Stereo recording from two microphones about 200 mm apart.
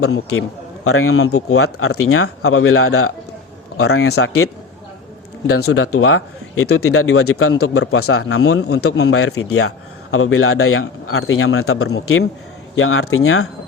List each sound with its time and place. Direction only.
0.9 s a man's voice: 90° left
5.5 s a man's voice: 90° left
8.3 s a man's voice: 80° left